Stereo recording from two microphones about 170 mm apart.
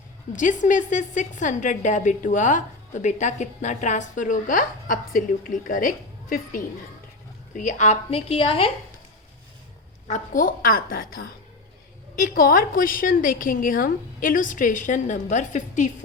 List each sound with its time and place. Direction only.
0.3 s a woman's voice: 50° left (ahead or behind); by 8.7 s 30° left (ahead or behind)
10.1 s a woman's voice: 50° left (ahead or behind)